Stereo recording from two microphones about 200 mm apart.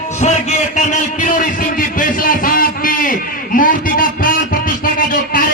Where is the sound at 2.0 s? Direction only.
45° left (ahead or behind).